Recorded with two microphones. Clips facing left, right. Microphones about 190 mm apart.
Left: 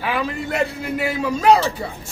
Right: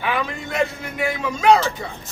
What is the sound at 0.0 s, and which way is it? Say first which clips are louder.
A man's voice: left 1 dB; 35° left (ahead or behind).